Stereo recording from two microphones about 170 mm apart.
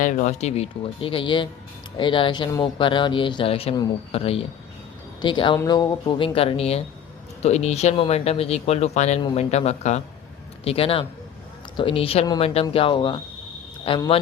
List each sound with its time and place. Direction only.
0.0 s a man's voice: 50° left (ahead or behind); by 14.2 s 30° left (ahead or behind)